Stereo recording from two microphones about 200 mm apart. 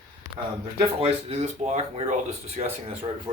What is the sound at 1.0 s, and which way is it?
Speech, 30° right (ahead or behind).